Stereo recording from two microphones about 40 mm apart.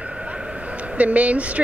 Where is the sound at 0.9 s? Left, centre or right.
Right.